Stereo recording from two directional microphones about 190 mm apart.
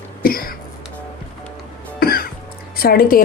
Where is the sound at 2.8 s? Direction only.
50° left (ahead or behind).